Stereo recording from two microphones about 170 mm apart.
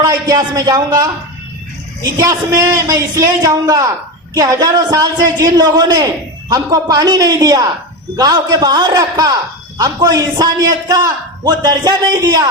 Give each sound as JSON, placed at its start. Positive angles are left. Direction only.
{"t": 0.0, "sound": "a man's voice", "side_deg": -20}